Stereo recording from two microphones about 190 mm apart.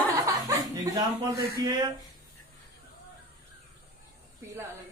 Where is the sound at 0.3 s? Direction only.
20° right (ahead or behind).